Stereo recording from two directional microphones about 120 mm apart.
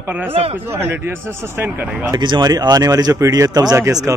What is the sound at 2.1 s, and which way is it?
Speech, 35° right (ahead or behind).